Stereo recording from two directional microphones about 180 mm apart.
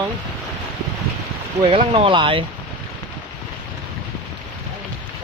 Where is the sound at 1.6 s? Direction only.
30° right (ahead or behind).